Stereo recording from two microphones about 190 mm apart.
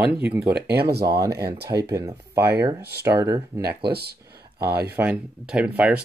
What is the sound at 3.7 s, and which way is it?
Speech, 55° right (ahead or behind).